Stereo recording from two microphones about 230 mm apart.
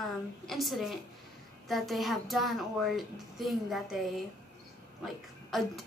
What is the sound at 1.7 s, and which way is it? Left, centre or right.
A woman's voice, centre.